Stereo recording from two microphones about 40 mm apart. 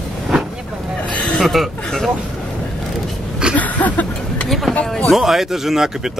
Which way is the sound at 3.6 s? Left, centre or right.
Left.